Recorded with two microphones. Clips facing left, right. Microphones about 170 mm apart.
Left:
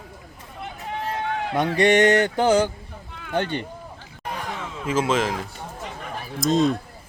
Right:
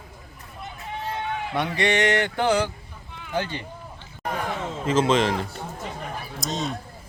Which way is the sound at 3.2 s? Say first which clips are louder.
Left 3 dB; 60° left (ahead or behind).